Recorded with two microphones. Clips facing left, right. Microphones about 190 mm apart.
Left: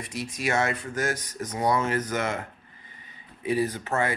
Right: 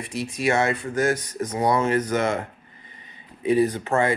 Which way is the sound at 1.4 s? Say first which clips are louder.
Right 3 dB; 30° right (ahead or behind).